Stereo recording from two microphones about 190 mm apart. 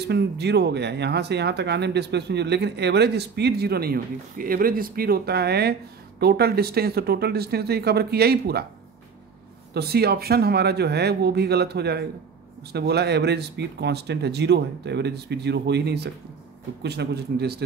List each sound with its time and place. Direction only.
0.0 s speech: 60° right (ahead or behind)
9.8 s speech: 55° right (ahead or behind)